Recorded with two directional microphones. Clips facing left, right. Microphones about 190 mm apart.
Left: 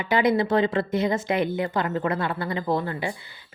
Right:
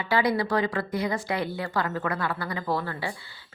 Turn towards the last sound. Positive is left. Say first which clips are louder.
# left 3 dB
turn(degrees=20)  # may be behind; listen again after turning